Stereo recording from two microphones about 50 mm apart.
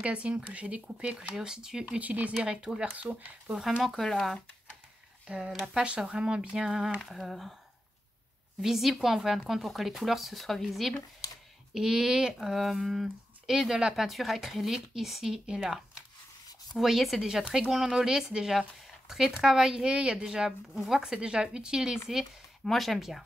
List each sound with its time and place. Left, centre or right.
0.0 s speech: right
1.1 s speech: centre
2.0 s speech: right
2.3 s speech: centre
2.9 s speech: right
3.8 s speech: centre
5.7 s speech: centre
8.5 s speech: centre
21.0 s speech: centre
22.7 s speech: centre